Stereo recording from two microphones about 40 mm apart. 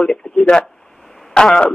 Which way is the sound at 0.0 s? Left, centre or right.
Centre.